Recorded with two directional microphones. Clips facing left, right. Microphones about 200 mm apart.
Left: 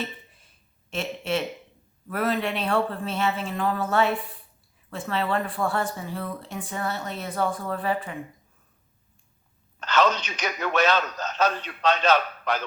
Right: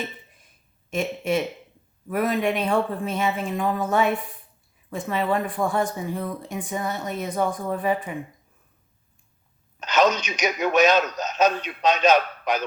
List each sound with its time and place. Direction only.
0.9 s speech: 15° right (ahead or behind)
9.8 s a sound: 15° right (ahead or behind)
10.4 s speech: 15° right (ahead or behind)